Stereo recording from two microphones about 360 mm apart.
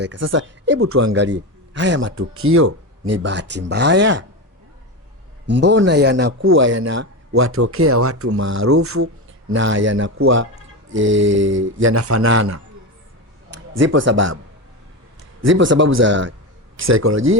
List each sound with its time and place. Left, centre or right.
0.0 s a man's voice: right
5.5 s a man's voice: right
15.4 s a man's voice: right